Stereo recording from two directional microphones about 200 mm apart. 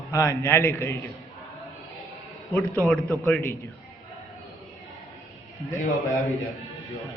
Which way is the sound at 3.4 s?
15° left (ahead or behind).